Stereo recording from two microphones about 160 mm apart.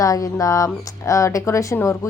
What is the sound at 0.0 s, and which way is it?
Speech, 20° left (ahead or behind).